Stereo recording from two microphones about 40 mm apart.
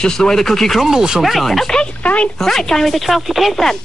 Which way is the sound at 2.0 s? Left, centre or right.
Left.